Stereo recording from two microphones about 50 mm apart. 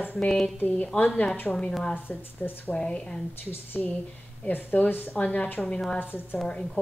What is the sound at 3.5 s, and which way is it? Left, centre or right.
A woman's voice, left.